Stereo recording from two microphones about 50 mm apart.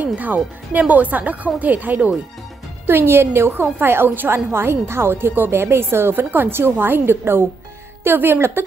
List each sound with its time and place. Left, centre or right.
0.0 s speech: right
2.9 s a woman's voice: right
3.6 s a woman's voice: right
4.5 s a woman's voice: right